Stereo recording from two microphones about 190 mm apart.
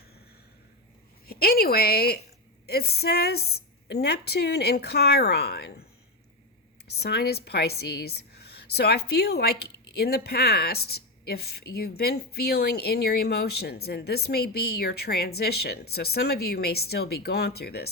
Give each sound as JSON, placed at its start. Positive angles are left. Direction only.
{"t": 1.3, "sound": "a woman's voice", "side_deg": 55}
{"t": 7.0, "sound": "a woman's voice", "side_deg": 55}